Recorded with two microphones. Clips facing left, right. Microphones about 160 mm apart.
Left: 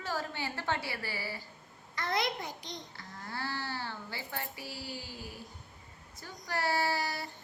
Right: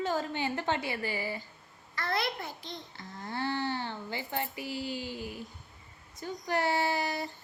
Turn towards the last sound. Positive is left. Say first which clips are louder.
# right 2 dB
turn(degrees=-20)  # may be behind; listen again after turning